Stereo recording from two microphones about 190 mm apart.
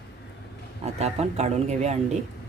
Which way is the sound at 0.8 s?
35° right (ahead or behind).